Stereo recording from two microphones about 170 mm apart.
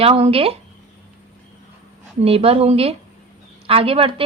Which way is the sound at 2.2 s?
35° right (ahead or behind).